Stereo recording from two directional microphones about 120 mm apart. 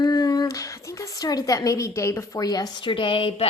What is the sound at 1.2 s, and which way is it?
A woman's voice, 30° left (ahead or behind).